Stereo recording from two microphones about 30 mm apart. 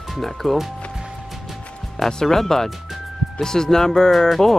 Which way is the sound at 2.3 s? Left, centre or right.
Centre.